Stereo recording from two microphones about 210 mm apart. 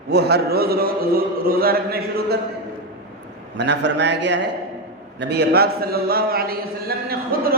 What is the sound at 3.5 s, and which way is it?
A man's voice, 55° right (ahead or behind).